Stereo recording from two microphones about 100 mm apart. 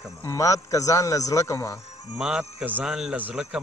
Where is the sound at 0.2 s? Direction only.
35° left (ahead or behind).